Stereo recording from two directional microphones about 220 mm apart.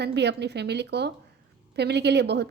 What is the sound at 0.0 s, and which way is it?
A woman's voice, 50° right (ahead or behind).